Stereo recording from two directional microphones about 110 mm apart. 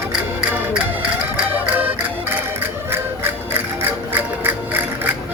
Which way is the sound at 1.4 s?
15° right (ahead or behind).